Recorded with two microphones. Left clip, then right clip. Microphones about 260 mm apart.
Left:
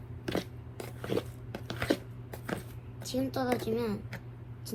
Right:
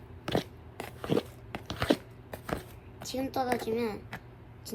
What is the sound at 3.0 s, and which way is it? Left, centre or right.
A woman's voice, right.